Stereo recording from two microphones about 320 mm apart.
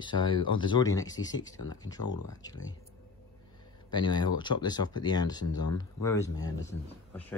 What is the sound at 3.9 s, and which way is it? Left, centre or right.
Speech, centre.